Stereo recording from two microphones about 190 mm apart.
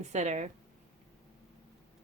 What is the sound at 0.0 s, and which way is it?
Speech, 40° right (ahead or behind).